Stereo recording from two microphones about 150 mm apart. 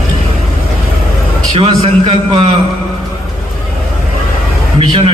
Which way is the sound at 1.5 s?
40° right (ahead or behind).